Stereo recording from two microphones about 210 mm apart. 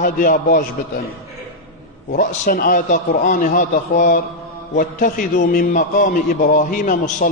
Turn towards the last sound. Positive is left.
turn(degrees=40)  # may be behind; listen again after turning